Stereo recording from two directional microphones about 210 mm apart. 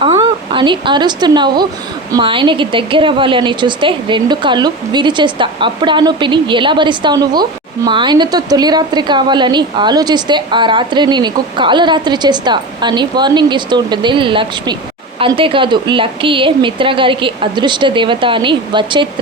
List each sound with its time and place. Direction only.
0.0 s a woman's voice: 25° right (ahead or behind)